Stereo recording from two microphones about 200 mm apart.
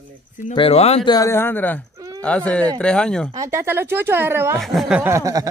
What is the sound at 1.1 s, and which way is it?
Speech, 15° left (ahead or behind).